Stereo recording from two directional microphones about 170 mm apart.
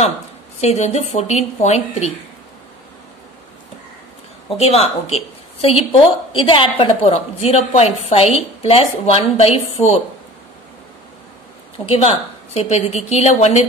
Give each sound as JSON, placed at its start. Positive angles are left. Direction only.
{"t": 0.6, "sound": "a woman's voice", "side_deg": 40}
{"t": 4.6, "sound": "a woman's voice", "side_deg": 35}
{"t": 11.8, "sound": "a woman's voice", "side_deg": 35}